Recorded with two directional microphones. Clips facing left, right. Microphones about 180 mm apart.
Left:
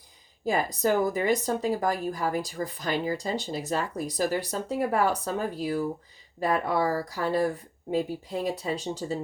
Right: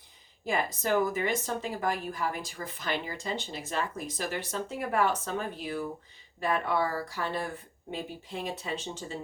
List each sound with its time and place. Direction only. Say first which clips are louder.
0.4 s speech: left 5 dB; 40° left (ahead or behind)